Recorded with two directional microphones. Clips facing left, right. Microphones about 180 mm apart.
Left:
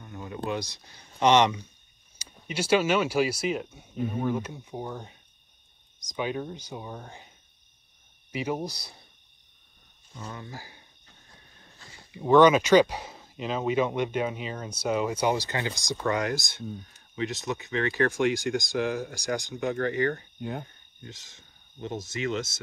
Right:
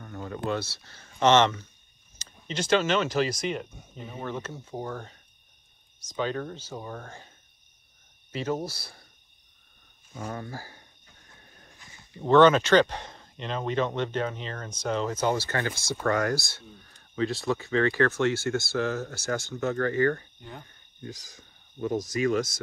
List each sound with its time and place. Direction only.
0.5 s speech: 15° left (ahead or behind)
10.1 s speech: 50° right (ahead or behind)
12.1 s speech: 10° left (ahead or behind)
20.3 s speech: 65° left (ahead or behind)
21.1 s speech: 25° left (ahead or behind)